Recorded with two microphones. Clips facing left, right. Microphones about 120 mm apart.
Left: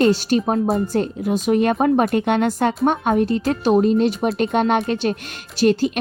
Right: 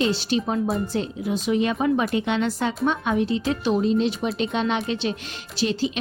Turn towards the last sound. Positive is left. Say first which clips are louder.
# left 7 dB
turn(degrees=50)  # may be behind; listen again after turning